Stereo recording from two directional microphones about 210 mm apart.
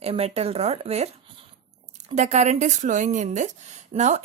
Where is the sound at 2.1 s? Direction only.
35° right (ahead or behind).